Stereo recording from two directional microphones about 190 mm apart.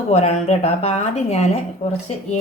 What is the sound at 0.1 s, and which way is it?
A woman's voice, 35° left (ahead or behind).